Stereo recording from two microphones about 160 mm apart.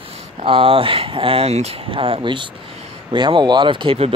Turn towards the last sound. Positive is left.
turn(degrees=-35)  # may be behind; listen again after turning